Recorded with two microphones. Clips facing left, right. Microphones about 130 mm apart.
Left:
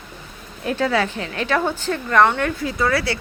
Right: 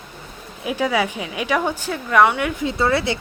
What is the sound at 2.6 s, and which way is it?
Speech, 25° right (ahead or behind).